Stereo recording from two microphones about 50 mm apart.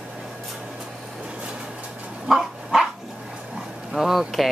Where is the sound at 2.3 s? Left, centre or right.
Centre.